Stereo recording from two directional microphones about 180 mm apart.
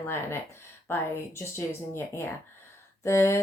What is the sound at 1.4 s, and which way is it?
Speech, 15° left (ahead or behind).